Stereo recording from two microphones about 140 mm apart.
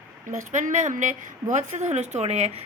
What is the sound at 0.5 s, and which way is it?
Speech, 60° right (ahead or behind).